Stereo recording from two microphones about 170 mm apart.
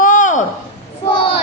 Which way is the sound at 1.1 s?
30° left (ahead or behind).